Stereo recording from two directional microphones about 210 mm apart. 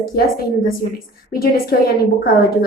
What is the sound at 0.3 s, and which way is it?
A woman's voice, 45° left (ahead or behind).